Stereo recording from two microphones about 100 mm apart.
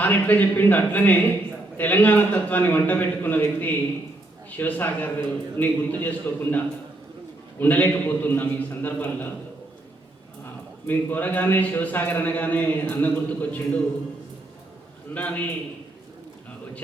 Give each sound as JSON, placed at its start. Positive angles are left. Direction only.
{"t": 0.0, "sound": "a man's voice", "side_deg": 15}
{"t": 7.6, "sound": "a man's voice", "side_deg": 15}
{"t": 10.4, "sound": "a man's voice", "side_deg": 20}
{"t": 15.1, "sound": "a man's voice", "side_deg": 15}